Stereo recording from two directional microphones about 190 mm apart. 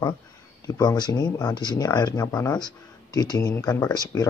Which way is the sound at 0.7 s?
20° left (ahead or behind).